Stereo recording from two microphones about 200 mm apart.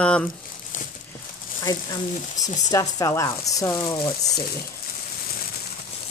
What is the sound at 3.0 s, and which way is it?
Speech, 15° left (ahead or behind).